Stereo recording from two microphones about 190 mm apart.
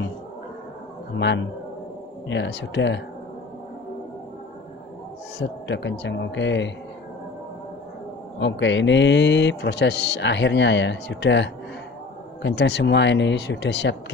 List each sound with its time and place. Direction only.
1.1 s a man's voice: 70° left (ahead or behind)
5.4 s a man's voice: 70° left (ahead or behind)
8.4 s a man's voice: 70° left (ahead or behind)